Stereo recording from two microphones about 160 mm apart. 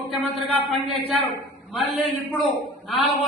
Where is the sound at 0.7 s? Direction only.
Centre (ahead or behind).